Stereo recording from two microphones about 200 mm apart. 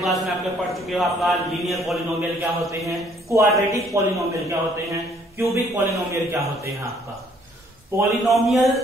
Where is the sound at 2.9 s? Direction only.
15° right (ahead or behind).